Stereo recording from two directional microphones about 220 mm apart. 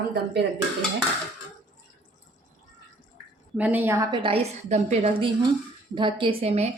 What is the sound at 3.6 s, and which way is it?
A woman's voice, 10° right (ahead or behind).